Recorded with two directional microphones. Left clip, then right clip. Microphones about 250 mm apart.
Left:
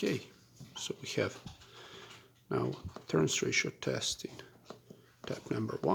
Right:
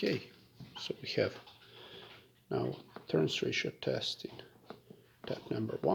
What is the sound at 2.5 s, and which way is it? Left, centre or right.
Speech, centre.